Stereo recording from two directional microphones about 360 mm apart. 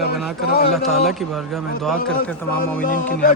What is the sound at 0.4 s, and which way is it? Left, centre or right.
Music, left.